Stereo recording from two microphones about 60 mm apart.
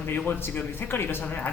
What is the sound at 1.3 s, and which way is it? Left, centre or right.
Speech, left.